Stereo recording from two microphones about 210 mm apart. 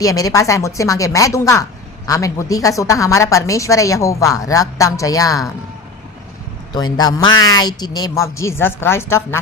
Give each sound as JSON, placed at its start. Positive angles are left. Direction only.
{"t": 0.0, "sound": "a woman's voice", "side_deg": 15}
{"t": 6.7, "sound": "speech", "side_deg": 20}